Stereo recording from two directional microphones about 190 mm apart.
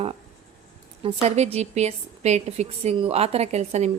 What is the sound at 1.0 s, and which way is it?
A woman's voice, 30° right (ahead or behind).